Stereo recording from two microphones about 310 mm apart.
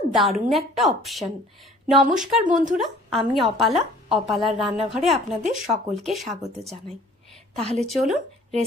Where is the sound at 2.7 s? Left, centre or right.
Centre.